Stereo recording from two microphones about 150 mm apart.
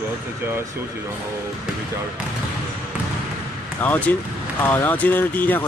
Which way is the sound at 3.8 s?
10° left (ahead or behind).